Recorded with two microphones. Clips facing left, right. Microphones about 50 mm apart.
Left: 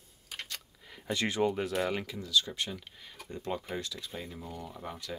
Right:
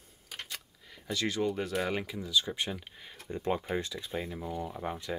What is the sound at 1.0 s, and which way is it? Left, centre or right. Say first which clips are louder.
Speech: left 2 dB; left.